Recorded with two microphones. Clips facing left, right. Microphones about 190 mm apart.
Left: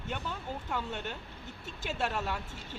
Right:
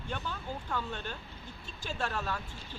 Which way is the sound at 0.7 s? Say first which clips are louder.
Left 1 dB; 20° left (ahead or behind).